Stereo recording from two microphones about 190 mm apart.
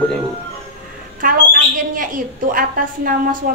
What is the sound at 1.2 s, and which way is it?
A woman's voice, 45° right (ahead or behind).